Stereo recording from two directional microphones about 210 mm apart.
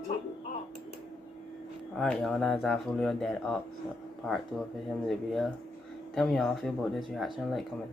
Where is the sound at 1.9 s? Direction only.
Centre (ahead or behind).